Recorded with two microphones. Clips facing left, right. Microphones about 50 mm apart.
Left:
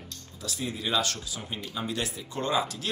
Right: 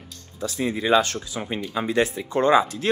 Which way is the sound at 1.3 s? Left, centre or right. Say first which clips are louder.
Right 10 dB; right.